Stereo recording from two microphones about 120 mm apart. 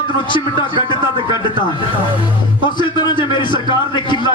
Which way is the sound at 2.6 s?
40° left (ahead or behind).